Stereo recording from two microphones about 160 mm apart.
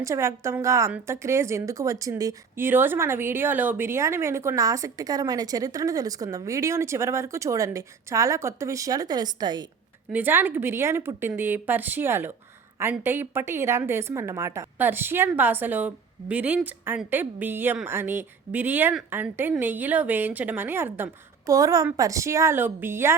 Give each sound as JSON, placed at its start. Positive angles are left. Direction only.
{"t": 0.0, "sound": "a woman's voice", "side_deg": -20}
{"t": 10.1, "sound": "a woman's voice", "side_deg": -10}